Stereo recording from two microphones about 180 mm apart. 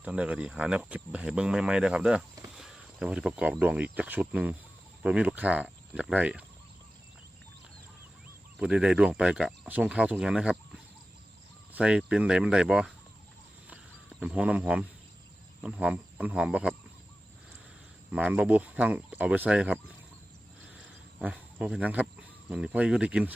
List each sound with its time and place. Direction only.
0.0 s speech: 5° right (ahead or behind)
8.5 s speech: 5° right (ahead or behind)
11.7 s speech: 5° right (ahead or behind)
14.2 s speech: 5° right (ahead or behind)
18.1 s speech: 5° right (ahead or behind)
20.7 s a sound: 5° right (ahead or behind)
22.4 s speech: 5° right (ahead or behind)